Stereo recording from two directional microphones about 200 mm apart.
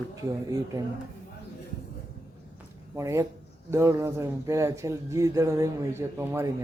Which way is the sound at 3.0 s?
15° right (ahead or behind).